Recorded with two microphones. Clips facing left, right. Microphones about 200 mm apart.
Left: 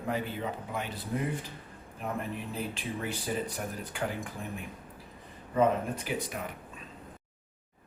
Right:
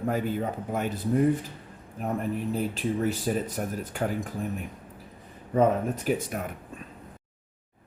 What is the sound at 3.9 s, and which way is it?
Speech, 45° right (ahead or behind).